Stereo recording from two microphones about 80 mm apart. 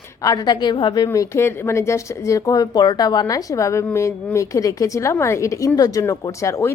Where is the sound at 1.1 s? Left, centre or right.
Left.